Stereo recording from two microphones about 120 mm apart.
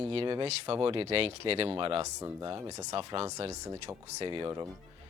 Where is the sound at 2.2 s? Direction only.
35° right (ahead or behind).